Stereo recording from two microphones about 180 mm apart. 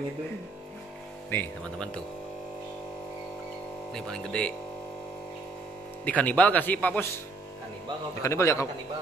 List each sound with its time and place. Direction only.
1.3 s speech: 10° left (ahead or behind)
3.9 s speech: 5° left (ahead or behind)
6.0 s speech: 10° left (ahead or behind)
8.2 s speech: 15° left (ahead or behind)